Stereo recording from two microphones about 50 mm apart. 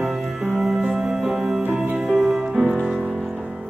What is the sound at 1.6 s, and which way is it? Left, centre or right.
Music, right.